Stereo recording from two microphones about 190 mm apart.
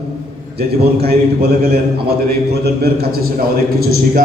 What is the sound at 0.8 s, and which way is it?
A man's voice, 55° right (ahead or behind).